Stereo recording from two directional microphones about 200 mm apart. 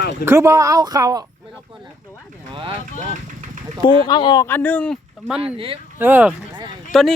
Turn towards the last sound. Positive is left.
turn(degrees=0)  # may be behind; listen again after turning